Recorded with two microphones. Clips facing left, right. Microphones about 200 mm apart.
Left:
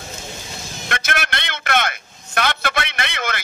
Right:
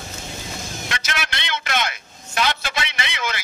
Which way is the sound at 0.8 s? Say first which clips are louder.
Left 6 dB; 55° left (ahead or behind).